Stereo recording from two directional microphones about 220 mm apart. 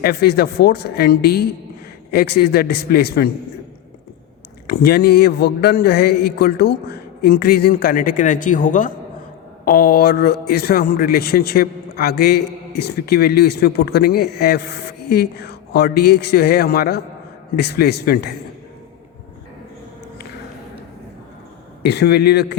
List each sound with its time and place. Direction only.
0.0 s a man's voice: 45° left (ahead or behind)
4.6 s a man's voice: 45° left (ahead or behind)
21.8 s a man's voice: 50° left (ahead or behind)